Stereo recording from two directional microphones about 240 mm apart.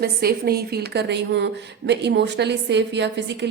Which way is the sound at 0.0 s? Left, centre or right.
Right.